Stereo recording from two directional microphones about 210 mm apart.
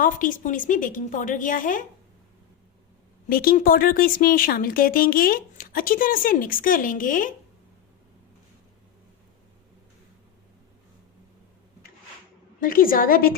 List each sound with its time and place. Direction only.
0.0 s a woman's voice: 40° left (ahead or behind)
3.2 s speech: 45° left (ahead or behind)
12.5 s speech: 40° left (ahead or behind)